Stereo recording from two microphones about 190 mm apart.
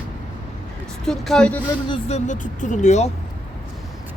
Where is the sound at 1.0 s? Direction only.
5° left (ahead or behind).